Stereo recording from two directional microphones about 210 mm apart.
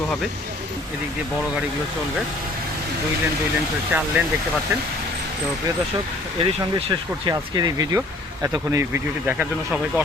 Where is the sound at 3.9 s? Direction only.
10° right (ahead or behind).